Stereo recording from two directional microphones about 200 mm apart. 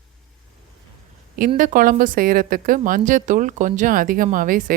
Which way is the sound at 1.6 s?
40° right (ahead or behind).